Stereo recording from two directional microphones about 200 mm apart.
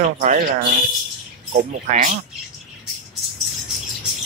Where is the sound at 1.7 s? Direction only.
35° right (ahead or behind).